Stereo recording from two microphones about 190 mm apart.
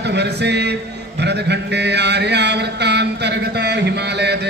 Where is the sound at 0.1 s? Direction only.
65° right (ahead or behind).